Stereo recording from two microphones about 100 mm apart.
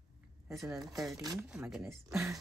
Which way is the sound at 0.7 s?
5° right (ahead or behind).